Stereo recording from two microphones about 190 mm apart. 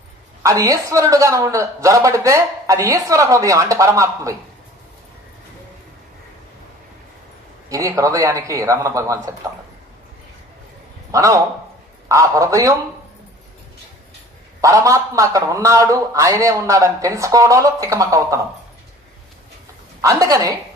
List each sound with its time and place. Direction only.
0.4 s a man's voice: 15° right (ahead or behind)
7.7 s a man's voice: 15° right (ahead or behind)
11.1 s a man's voice: 15° right (ahead or behind)
14.6 s a man's voice: 15° right (ahead or behind)
20.0 s a man's voice: 15° right (ahead or behind)